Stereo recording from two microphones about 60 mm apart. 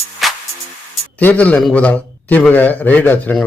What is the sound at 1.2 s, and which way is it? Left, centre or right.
A man's voice, left.